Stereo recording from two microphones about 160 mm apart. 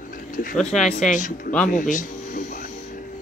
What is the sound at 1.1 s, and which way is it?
Speech, 55° left (ahead or behind).